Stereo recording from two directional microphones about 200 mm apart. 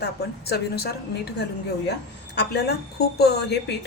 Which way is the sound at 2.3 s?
55° left (ahead or behind).